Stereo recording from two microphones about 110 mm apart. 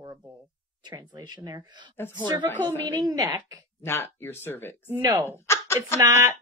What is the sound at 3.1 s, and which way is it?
Speech, 35° right (ahead or behind).